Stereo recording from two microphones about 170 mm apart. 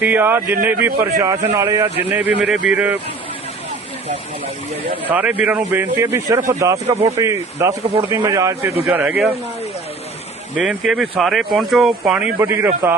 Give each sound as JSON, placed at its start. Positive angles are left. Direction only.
{"t": 0.0, "sound": "speech", "side_deg": -10}
{"t": 5.0, "sound": "speech", "side_deg": -10}
{"t": 10.6, "sound": "speech", "side_deg": -5}